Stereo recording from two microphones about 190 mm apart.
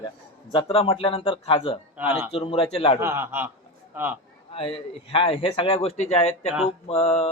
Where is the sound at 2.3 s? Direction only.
30° left (ahead or behind).